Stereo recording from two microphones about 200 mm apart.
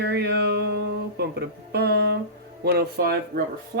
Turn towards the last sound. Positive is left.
turn(degrees=-50)  # may be behind; listen again after turning